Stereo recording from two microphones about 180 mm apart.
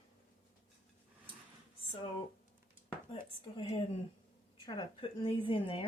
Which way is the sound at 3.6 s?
30° left (ahead or behind).